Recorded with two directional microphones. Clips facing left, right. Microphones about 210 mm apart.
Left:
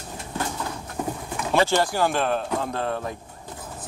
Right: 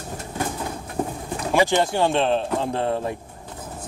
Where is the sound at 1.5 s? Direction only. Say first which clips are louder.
Right 2 dB; 15° right (ahead or behind).